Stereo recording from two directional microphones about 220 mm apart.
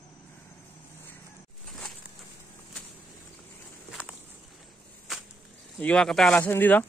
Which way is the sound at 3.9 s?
5° right (ahead or behind).